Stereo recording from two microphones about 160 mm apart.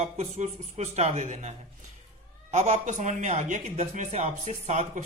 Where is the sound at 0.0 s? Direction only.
45° right (ahead or behind).